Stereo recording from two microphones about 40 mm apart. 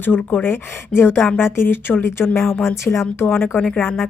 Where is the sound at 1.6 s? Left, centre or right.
Left.